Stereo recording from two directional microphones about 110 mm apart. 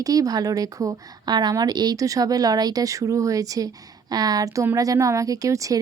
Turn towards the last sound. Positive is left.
turn(degrees=-30)  # may be behind; listen again after turning